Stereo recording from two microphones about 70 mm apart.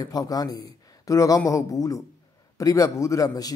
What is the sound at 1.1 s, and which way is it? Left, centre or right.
A man's voice, left.